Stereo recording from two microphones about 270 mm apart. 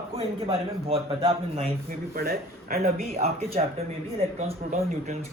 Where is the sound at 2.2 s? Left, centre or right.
Right.